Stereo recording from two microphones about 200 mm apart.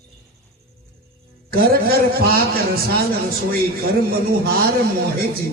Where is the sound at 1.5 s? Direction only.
50° right (ahead or behind).